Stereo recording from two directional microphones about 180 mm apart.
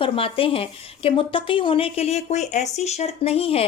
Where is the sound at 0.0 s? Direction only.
30° left (ahead or behind).